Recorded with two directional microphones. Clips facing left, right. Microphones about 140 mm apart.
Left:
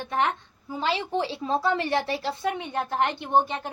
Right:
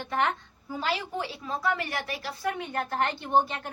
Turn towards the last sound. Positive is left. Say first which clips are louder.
# left 2 dB
turn(degrees=20)  # may be behind; listen again after turning